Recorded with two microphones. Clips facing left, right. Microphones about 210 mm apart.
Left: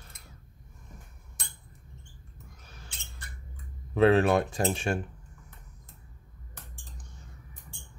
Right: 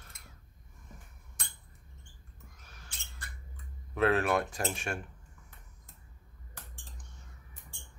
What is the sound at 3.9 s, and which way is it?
Speech, 30° left (ahead or behind).